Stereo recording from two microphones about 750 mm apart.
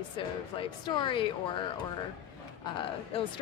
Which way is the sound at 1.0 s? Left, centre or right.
Centre.